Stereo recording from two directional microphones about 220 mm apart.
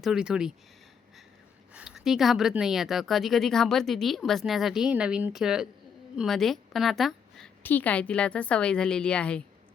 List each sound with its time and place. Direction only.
0.0 s speech: 5° right (ahead or behind)
1.7 s speech: centre (ahead or behind)